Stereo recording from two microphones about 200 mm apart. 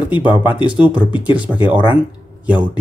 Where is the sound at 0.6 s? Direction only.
5° right (ahead or behind).